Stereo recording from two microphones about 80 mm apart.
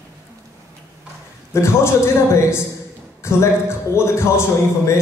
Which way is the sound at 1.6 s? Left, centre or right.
Left.